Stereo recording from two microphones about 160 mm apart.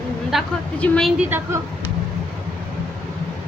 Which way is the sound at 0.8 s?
5° left (ahead or behind).